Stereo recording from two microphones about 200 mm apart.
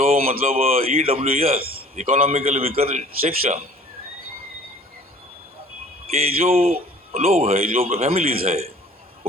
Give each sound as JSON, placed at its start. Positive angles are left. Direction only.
{"t": 0.1, "sound": "a man's voice", "side_deg": -30}
{"t": 6.1, "sound": "a man's voice", "side_deg": -30}